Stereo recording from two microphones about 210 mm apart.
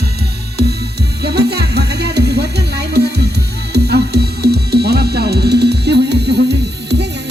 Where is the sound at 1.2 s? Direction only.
50° right (ahead or behind).